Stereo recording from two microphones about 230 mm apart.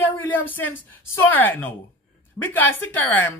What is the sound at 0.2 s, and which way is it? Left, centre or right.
Speech, centre.